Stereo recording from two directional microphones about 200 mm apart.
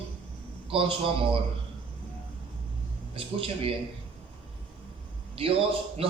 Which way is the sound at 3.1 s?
30° right (ahead or behind).